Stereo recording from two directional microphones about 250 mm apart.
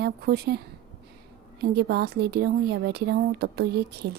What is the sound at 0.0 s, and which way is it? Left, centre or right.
Speech, right.